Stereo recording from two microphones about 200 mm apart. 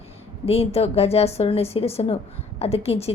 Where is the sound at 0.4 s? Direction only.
30° left (ahead or behind).